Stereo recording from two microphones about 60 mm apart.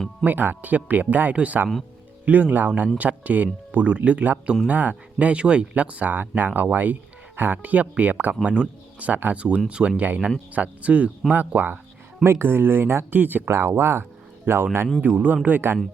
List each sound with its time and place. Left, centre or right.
0.3 s speech: right
12.2 s speech: right
13.5 s speech: right
15.0 s speech: right